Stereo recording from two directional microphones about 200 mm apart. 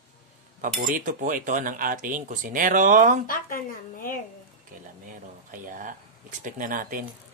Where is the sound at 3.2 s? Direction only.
45° left (ahead or behind).